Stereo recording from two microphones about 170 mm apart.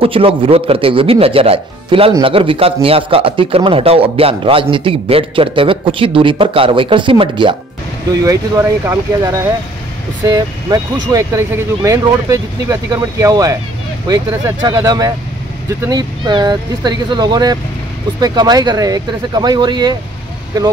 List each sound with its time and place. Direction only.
0.0 s a man's voice: 30° right (ahead or behind)
8.1 s speech: 20° right (ahead or behind)